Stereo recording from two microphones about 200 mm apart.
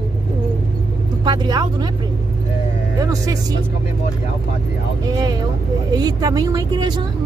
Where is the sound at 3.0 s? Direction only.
15° right (ahead or behind).